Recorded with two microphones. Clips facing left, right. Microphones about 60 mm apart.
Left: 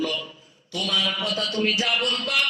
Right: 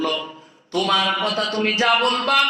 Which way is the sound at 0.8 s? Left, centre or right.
Right.